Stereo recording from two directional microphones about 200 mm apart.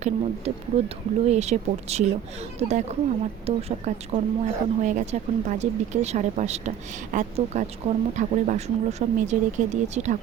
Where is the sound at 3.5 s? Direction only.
30° right (ahead or behind).